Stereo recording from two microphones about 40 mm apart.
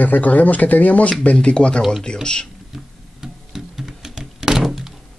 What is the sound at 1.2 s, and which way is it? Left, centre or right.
Speech, left.